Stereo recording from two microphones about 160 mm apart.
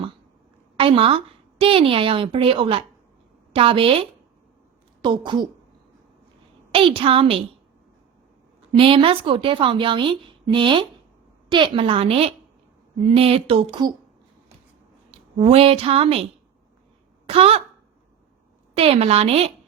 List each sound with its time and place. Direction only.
0.8 s a woman's voice: 35° right (ahead or behind)
6.7 s a woman's voice: 35° right (ahead or behind)
8.7 s a woman's voice: 35° right (ahead or behind)
15.1 s a woman's voice: 35° right (ahead or behind)
17.2 s speech: 35° right (ahead or behind)
18.8 s a woman's voice: 35° right (ahead or behind)